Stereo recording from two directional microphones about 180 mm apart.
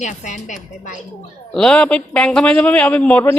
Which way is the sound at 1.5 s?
5° left (ahead or behind).